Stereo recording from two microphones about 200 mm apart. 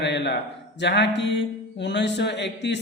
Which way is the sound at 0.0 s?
60° left (ahead or behind).